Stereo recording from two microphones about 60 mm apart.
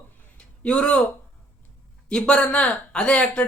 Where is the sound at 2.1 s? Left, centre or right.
Centre.